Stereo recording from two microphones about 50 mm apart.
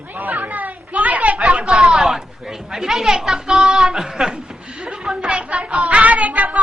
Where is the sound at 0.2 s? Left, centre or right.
Right.